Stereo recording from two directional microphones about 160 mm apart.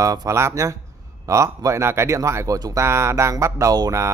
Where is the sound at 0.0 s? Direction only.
20° right (ahead or behind).